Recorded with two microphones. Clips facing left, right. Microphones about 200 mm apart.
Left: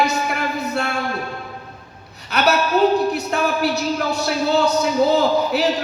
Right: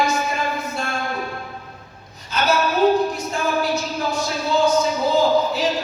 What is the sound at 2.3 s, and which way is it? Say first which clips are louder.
A woman's voice: left 2 dB; 65° left (ahead or behind).